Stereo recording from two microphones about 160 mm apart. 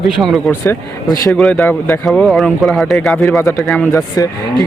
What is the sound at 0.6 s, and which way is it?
Speech, 20° left (ahead or behind).